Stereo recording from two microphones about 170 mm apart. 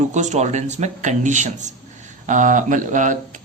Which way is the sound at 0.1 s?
45° right (ahead or behind).